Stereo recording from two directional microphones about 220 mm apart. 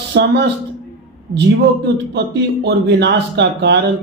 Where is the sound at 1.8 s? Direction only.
50° right (ahead or behind).